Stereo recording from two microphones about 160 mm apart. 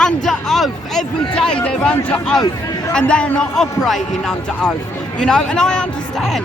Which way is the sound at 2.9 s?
5° left (ahead or behind).